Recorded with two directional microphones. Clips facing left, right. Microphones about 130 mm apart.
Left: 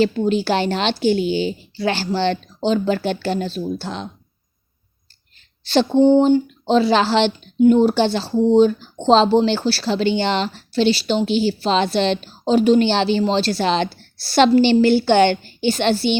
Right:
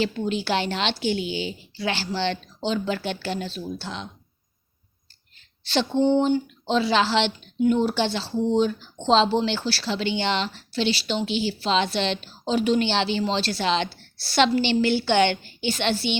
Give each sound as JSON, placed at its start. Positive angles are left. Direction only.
{"t": 0.0, "sound": "a woman's voice", "side_deg": 40}
{"t": 5.6, "sound": "a woman's voice", "side_deg": 40}